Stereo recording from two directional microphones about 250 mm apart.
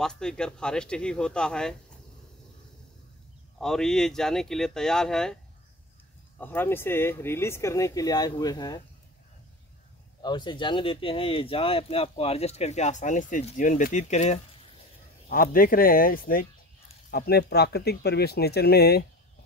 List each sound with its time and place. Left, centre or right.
0.0 s speech: centre
3.5 s speech: centre
10.2 s speech: centre; by 19.0 s left